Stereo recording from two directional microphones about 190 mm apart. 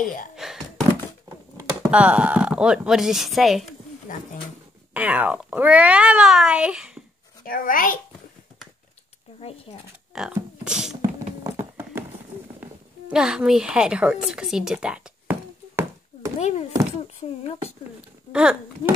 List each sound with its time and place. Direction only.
0.4 s thunk: centre (ahead or behind)
1.6 s speech: 5° right (ahead or behind)
4.1 s a child's voice: 45° left (ahead or behind)
4.9 s speech: 10° right (ahead or behind)
7.4 s a child's voice: 45° left (ahead or behind)
9.4 s speech: 30° left (ahead or behind)
10.1 s speech: 5° right (ahead or behind)
13.1 s a woman's voice: 5° right (ahead or behind)
16.3 s speech: 35° left (ahead or behind)
18.3 s speech: 5° right (ahead or behind)